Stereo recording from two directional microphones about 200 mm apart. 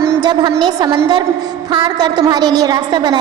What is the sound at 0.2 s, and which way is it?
A woman's voice, 20° right (ahead or behind).